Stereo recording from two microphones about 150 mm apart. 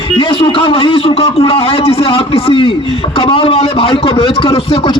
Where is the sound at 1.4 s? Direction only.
40° left (ahead or behind).